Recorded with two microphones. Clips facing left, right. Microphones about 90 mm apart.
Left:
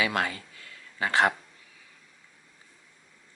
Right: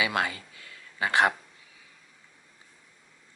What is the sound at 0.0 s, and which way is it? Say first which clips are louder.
Speech: even; 15° right (ahead or behind).